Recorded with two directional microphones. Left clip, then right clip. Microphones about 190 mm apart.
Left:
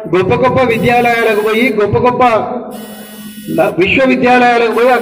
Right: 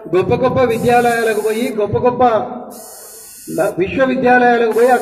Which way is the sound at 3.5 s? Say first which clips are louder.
Left 5 dB; 50° right (ahead or behind).